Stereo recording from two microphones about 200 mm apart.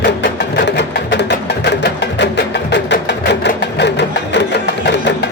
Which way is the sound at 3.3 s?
60° left (ahead or behind).